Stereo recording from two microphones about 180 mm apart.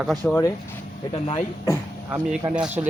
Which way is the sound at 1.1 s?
35° left (ahead or behind).